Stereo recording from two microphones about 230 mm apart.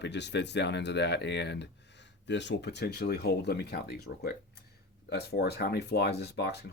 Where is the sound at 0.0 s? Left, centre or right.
Left.